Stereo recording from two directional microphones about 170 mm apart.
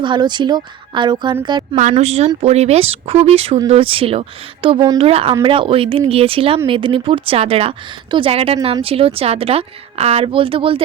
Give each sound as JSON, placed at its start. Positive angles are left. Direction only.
{"t": 0.0, "sound": "a woman's voice", "side_deg": -25}
{"t": 1.7, "sound": "a woman's voice", "side_deg": -45}